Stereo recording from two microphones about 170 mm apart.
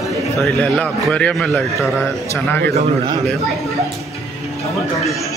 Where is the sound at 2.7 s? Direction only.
25° right (ahead or behind).